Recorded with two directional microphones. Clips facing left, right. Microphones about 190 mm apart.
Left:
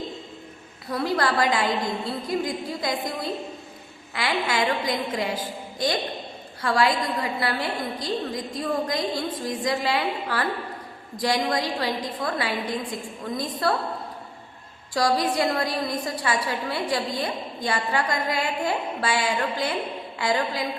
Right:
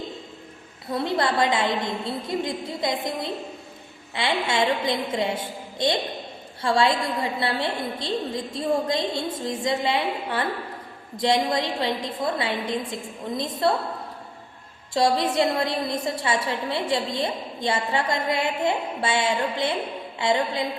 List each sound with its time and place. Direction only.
0.9 s a woman's voice: 25° right (ahead or behind)
14.9 s a woman's voice: 25° right (ahead or behind)